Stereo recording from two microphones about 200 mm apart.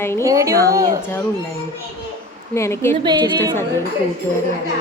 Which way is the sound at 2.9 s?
20° right (ahead or behind).